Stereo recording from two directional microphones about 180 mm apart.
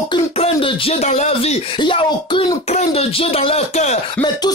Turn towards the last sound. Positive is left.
turn(degrees=35)  # may be behind; listen again after turning